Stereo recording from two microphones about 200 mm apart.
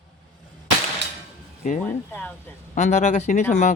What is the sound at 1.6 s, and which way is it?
Speech, 35° left (ahead or behind).